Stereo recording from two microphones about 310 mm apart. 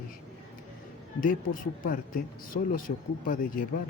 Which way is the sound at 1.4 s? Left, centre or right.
Left.